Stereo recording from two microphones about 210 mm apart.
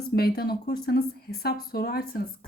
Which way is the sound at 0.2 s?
45° left (ahead or behind).